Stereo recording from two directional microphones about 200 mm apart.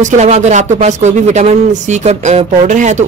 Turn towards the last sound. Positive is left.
turn(degrees=-35)  # may be behind; listen again after turning